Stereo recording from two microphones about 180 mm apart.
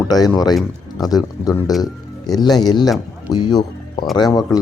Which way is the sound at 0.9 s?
20° left (ahead or behind).